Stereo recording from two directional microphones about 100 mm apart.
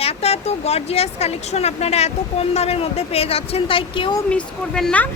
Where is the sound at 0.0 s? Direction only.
90° left; by 4.1 s 60° left (ahead or behind).